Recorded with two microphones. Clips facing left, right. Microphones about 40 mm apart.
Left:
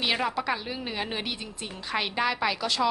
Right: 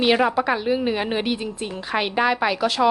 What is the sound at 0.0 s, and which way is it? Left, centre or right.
A woman's voice, centre.